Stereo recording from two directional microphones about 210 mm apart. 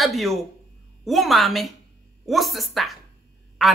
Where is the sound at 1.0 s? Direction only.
Centre (ahead or behind).